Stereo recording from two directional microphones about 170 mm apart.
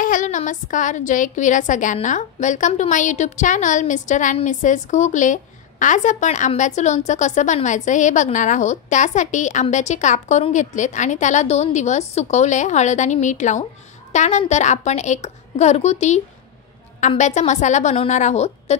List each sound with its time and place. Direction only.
0.0 s a woman's voice: 50° left (ahead or behind)
17.2 s a woman's voice: 45° left (ahead or behind)